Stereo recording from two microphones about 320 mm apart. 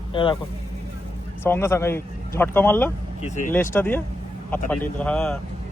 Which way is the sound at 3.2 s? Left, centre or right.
Left.